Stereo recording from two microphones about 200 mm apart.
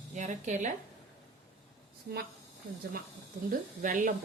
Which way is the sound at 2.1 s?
45° right (ahead or behind).